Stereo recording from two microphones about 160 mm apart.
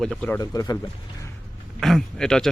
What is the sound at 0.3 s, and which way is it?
Speech, 20° left (ahead or behind).